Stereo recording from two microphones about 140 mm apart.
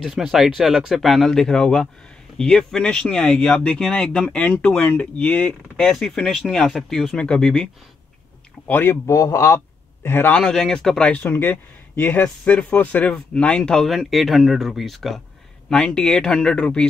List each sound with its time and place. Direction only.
0.0 s speech: centre (ahead or behind)
8.6 s speech: 15° left (ahead or behind)